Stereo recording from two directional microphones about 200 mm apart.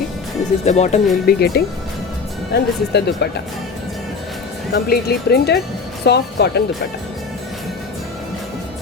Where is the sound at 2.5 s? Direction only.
55° left (ahead or behind).